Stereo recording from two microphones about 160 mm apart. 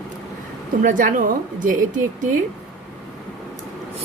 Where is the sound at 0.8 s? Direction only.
55° right (ahead or behind).